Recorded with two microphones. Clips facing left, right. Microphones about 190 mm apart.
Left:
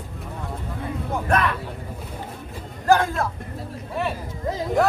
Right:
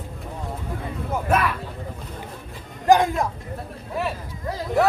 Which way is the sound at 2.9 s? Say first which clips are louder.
Right 2 dB; 15° right (ahead or behind).